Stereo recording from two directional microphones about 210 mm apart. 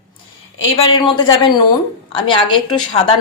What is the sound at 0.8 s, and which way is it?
A woman's voice, 25° left (ahead or behind).